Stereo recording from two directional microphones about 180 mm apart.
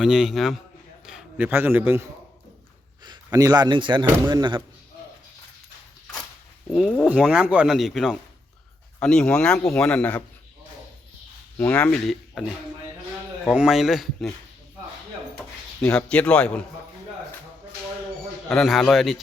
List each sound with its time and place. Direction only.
0.0 s a man's voice: 5° right (ahead or behind)
3.3 s a man's voice: 20° right (ahead or behind)
6.7 s a man's voice: 5° left (ahead or behind)
11.5 s speech: 5° left (ahead or behind)
13.5 s a man's voice: 5° right (ahead or behind)
15.4 s speech: 5° left (ahead or behind)
18.4 s a man's voice: centre (ahead or behind)